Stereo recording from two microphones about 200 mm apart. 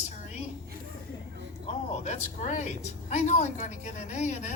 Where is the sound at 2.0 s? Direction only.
35° left (ahead or behind).